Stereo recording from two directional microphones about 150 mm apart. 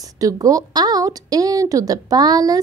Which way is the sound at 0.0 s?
25° right (ahead or behind).